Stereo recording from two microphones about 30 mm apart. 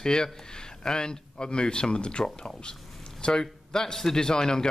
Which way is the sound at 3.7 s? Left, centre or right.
Centre.